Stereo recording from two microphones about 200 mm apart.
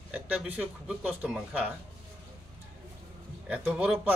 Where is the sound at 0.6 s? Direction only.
5° right (ahead or behind).